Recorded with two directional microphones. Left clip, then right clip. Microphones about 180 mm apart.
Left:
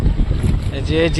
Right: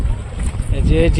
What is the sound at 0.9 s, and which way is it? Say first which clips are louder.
Speech: even; centre (ahead or behind).